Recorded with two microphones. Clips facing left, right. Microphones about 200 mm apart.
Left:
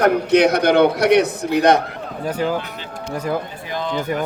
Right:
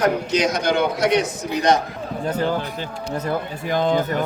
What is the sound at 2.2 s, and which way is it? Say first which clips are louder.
Speech: left 1 dB; 10° left (ahead or behind).